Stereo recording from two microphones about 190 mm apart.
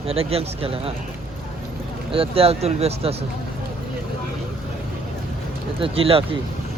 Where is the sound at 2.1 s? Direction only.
30° right (ahead or behind).